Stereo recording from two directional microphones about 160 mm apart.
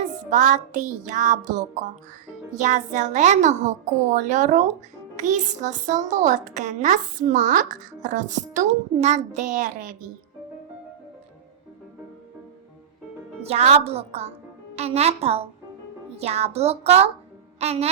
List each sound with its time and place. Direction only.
0.3 s a child's voice: 50° right (ahead or behind)
13.5 s a woman's voice: 40° right (ahead or behind)